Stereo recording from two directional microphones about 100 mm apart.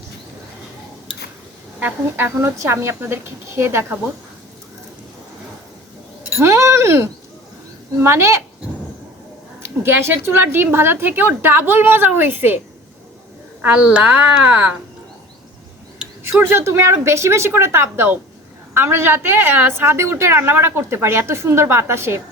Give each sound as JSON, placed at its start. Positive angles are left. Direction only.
{"t": 1.8, "sound": "a woman's voice", "side_deg": -25}
{"t": 6.3, "sound": "chink", "side_deg": -25}
{"t": 8.0, "sound": "a woman's voice", "side_deg": -25}
{"t": 9.6, "sound": "a woman's voice", "side_deg": -25}
{"t": 13.6, "sound": "a woman's voice", "side_deg": -10}
{"t": 16.4, "sound": "a woman's voice", "side_deg": -25}